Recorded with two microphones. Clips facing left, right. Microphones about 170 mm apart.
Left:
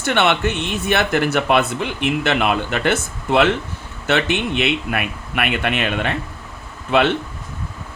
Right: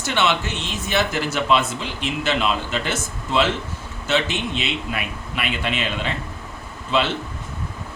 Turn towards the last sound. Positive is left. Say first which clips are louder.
# left 5 dB
turn(degrees=60)  # may be behind; listen again after turning